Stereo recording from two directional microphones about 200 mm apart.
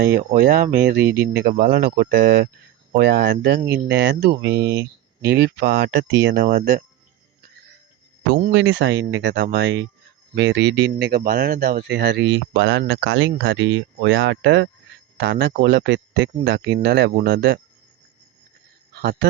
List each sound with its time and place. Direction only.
0.0 s speech: 55° right (ahead or behind)
8.5 s speech: 70° right (ahead or behind)